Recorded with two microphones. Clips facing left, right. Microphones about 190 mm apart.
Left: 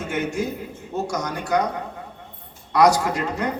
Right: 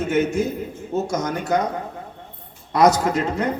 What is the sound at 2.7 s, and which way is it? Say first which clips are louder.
Speech: right 1 dB; 20° right (ahead or behind).